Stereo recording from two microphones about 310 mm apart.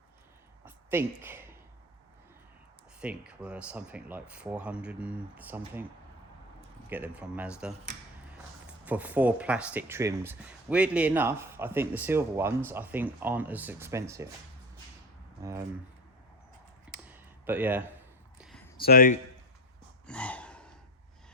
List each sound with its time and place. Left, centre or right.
0.6 s a sound: centre
3.0 s speech: centre
6.9 s speech: centre
8.8 s speech: centre
15.4 s speech: centre
16.9 s clicking: centre
18.3 s a sound: centre
18.9 s a man's voice: left
20.1 s gasp: centre